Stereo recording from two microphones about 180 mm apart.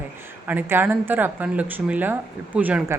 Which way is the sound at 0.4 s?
10° right (ahead or behind).